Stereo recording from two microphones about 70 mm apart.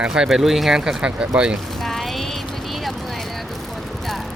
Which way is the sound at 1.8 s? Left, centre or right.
Centre.